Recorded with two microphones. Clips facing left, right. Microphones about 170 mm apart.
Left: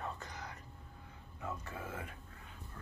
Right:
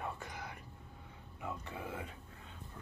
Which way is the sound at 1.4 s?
15° right (ahead or behind).